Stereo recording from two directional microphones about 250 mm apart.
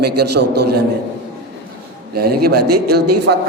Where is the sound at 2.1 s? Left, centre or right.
Right.